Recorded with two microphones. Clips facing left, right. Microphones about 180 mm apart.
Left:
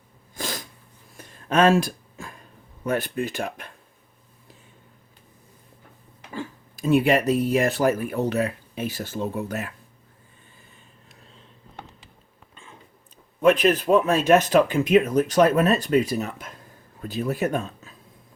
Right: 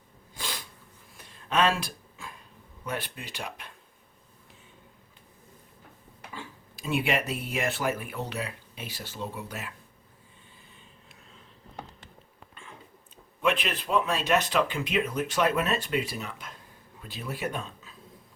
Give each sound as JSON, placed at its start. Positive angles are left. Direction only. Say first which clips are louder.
{"t": 0.3, "sound": "sneeze", "louder": "left 6 dB", "side_deg": 45}
{"t": 1.1, "sound": "a sound", "louder": "left 6 dB", "side_deg": 45}
{"t": 2.8, "sound": "speech", "louder": "left 10 dB", "side_deg": 45}
{"t": 6.3, "sound": "speech", "louder": "left 10 dB", "side_deg": 45}
{"t": 13.4, "sound": "speech", "louder": "left 10 dB", "side_deg": 45}